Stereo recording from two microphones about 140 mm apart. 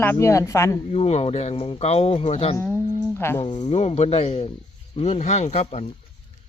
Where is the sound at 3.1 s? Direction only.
15° left (ahead or behind).